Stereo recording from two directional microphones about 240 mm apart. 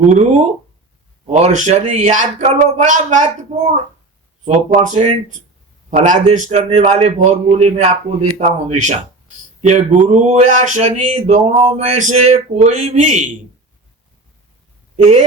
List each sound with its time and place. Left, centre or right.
0.1 s speech: right
4.4 s speech: right